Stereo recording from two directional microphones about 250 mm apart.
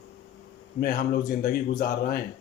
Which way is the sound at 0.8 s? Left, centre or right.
Left.